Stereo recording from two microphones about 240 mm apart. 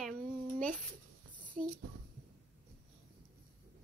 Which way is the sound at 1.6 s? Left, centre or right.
Right.